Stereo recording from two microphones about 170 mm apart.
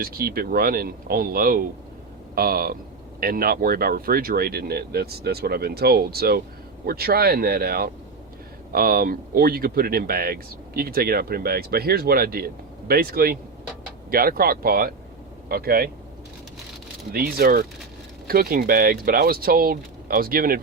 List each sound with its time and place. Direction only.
0.0 s speech: 60° right (ahead or behind)
17.1 s speech: 60° right (ahead or behind)